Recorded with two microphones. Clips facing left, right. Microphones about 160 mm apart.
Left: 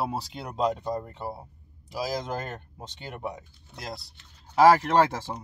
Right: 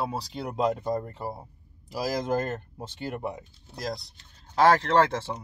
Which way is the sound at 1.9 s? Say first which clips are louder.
Right 3 dB; centre (ahead or behind).